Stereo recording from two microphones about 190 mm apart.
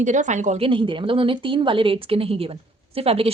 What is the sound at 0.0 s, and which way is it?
A woman's voice, 40° right (ahead or behind).